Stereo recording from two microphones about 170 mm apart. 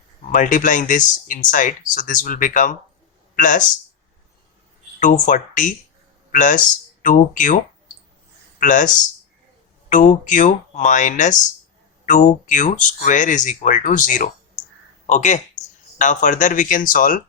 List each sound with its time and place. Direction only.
0.3 s speech: 50° left (ahead or behind)
4.9 s speech: 50° left (ahead or behind)
9.9 s a man's voice: 50° left (ahead or behind)
15.6 s a sound: 20° left (ahead or behind)
16.0 s speech: 50° left (ahead or behind)